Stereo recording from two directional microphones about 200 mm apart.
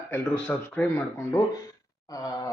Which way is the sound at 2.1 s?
15° left (ahead or behind).